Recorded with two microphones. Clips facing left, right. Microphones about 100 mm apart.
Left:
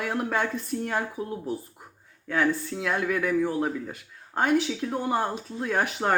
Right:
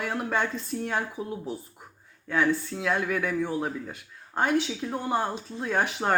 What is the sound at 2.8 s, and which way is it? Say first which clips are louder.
Speech: even; 50° left (ahead or behind).